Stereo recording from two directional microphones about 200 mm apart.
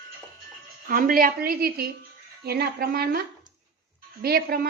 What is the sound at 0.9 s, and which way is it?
A woman's voice, 45° right (ahead or behind).